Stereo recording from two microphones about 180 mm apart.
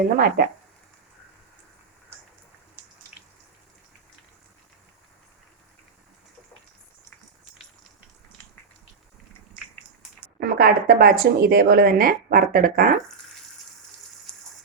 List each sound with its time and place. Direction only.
0.2 s speech: 55° right (ahead or behind)
2.8 s a sound: 10° right (ahead or behind)
10.4 s speech: 50° right (ahead or behind)